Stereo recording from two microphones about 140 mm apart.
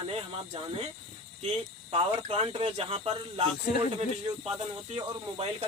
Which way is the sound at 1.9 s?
45° right (ahead or behind).